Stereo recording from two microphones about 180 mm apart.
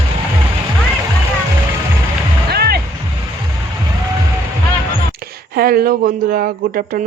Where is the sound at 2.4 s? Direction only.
60° right (ahead or behind).